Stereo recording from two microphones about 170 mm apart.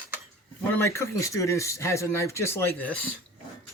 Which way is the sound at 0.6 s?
15° left (ahead or behind).